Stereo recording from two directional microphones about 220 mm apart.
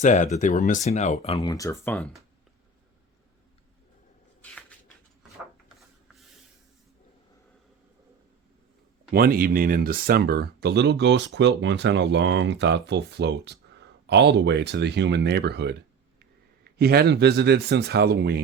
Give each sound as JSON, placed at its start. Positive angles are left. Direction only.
{"t": 0.0, "sound": "speech", "side_deg": 35}
{"t": 9.1, "sound": "speech", "side_deg": -40}